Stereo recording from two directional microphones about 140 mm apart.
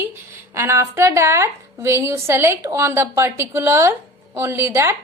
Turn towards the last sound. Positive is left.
turn(degrees=-15)  # may be behind; listen again after turning